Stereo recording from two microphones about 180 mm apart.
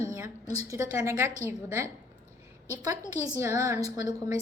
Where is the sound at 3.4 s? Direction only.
15° right (ahead or behind).